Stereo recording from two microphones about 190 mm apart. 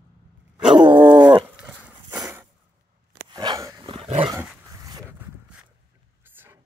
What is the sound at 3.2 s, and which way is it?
Dog, 20° right (ahead or behind).